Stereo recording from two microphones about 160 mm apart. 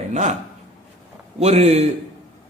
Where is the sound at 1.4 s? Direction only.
45° right (ahead or behind).